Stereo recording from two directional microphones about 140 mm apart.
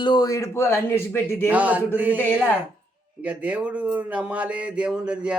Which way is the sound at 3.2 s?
10° right (ahead or behind).